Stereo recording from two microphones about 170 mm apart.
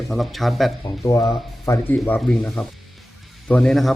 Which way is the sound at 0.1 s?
Centre (ahead or behind).